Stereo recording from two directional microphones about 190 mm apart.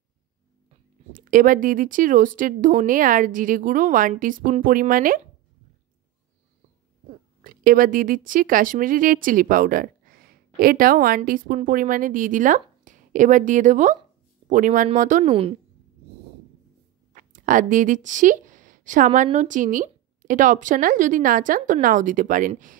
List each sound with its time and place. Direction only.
1.2 s speech: 45° right (ahead or behind)
7.4 s speech: 50° right (ahead or behind)
17.1 s speech: 45° right (ahead or behind)